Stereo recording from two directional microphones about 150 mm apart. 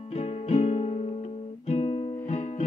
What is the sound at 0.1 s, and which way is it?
Music, 45° left (ahead or behind).